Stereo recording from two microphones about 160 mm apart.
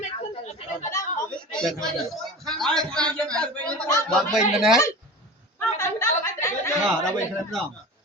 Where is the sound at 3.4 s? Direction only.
5° left (ahead or behind).